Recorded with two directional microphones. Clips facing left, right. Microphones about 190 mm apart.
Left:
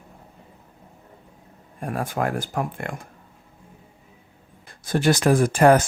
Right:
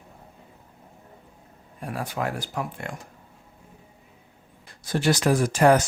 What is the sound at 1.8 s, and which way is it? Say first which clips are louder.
Speech: left 4 dB; 50° left (ahead or behind).